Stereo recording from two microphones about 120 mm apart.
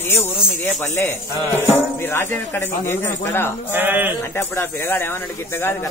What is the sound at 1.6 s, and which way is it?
Speech, 20° left (ahead or behind).